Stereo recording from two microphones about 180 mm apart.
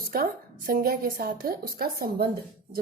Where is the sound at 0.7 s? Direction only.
50° right (ahead or behind).